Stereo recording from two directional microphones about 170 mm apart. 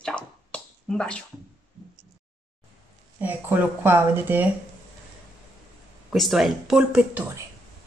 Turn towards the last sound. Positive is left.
turn(degrees=-5)  # may be behind; listen again after turning